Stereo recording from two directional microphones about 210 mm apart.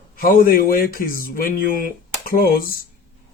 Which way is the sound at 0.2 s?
45° left (ahead or behind).